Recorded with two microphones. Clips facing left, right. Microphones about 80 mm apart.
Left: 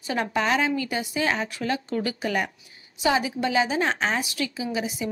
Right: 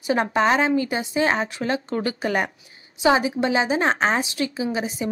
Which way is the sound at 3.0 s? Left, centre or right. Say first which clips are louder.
Right 4 dB; right.